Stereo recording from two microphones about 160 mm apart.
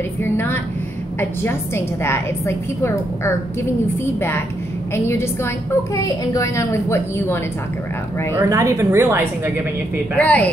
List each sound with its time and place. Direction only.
0.2 s a woman's voice: 15° left (ahead or behind)
2.0 s a woman's voice: 15° left (ahead or behind)
8.4 s a woman's voice: 20° right (ahead or behind)
10.1 s a woman's voice: 10° left (ahead or behind)